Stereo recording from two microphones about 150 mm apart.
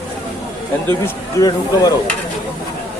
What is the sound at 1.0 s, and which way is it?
Speech, 25° left (ahead or behind).